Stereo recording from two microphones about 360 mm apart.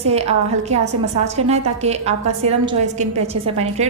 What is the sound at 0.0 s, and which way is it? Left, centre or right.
A woman's voice, centre.